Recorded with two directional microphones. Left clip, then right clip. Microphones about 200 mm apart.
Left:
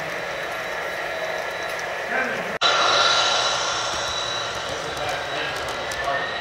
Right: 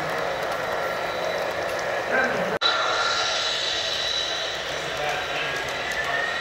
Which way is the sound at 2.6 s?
50° left (ahead or behind).